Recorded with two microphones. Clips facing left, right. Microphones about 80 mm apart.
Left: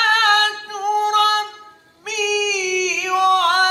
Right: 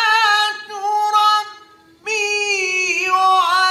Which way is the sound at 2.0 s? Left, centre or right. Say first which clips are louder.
Left 1 dB; left.